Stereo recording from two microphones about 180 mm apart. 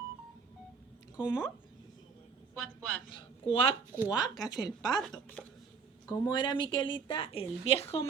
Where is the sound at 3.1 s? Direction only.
30° left (ahead or behind).